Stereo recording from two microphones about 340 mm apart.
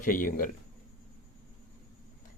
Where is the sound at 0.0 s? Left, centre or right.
Left.